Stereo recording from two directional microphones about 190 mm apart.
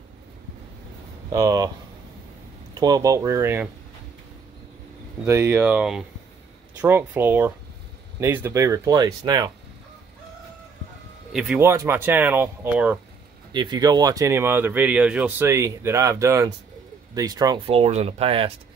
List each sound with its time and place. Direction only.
1.3 s speech: 20° right (ahead or behind)
2.7 s speech: 20° right (ahead or behind)
5.2 s speech: 10° right (ahead or behind)
11.3 s speech: 5° right (ahead or behind)
13.5 s speech: 25° right (ahead or behind)
17.6 s speech: 30° right (ahead or behind)